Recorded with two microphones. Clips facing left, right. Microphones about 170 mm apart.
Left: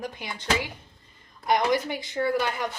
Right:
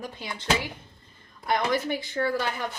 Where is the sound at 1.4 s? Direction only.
15° left (ahead or behind).